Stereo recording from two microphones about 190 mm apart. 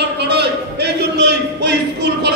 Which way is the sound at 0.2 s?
60° right (ahead or behind).